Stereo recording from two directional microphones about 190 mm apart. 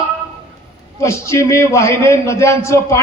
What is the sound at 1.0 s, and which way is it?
A man's voice, 15° left (ahead or behind).